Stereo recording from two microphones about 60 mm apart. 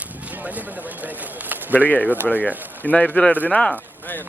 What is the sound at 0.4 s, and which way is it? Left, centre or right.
Speech, right.